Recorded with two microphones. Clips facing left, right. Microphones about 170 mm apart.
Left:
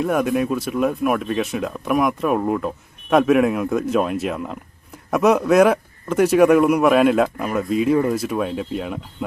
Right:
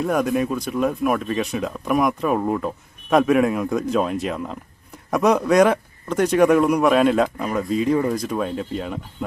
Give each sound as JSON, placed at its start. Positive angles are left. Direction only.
{"t": 0.0, "sound": "speech", "side_deg": 0}